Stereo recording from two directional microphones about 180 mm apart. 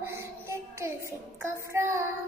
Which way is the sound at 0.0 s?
15° right (ahead or behind).